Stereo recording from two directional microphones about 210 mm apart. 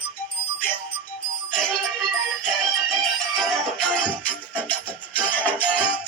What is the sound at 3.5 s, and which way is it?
Music, 5° left (ahead or behind).